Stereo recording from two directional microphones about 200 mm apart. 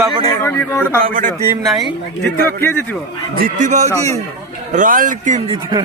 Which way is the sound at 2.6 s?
10° left (ahead or behind).